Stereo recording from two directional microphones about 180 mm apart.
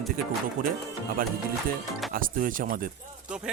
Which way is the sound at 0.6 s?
50° right (ahead or behind).